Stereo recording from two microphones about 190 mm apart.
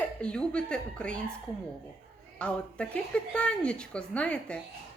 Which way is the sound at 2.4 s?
5° left (ahead or behind).